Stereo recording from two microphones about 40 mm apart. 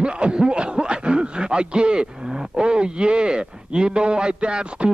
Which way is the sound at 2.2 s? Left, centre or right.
Centre.